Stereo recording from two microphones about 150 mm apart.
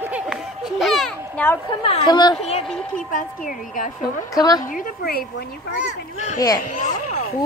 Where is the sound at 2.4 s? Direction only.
45° left (ahead or behind).